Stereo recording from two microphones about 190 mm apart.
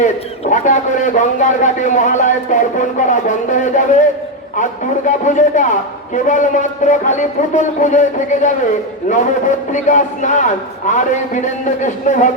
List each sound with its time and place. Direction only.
0.0 s a man's voice: 40° left (ahead or behind)